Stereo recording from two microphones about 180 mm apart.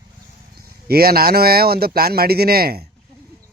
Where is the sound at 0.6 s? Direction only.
55° right (ahead or behind).